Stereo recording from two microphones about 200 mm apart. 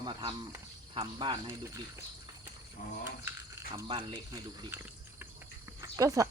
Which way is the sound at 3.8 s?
25° right (ahead or behind).